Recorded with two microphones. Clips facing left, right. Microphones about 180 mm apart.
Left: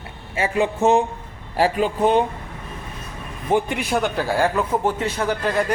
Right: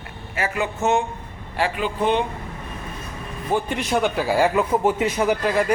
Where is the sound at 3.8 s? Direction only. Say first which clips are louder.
Right 1 dB; centre (ahead or behind).